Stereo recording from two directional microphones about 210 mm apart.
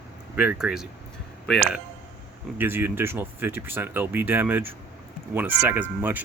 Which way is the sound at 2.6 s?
10° right (ahead or behind).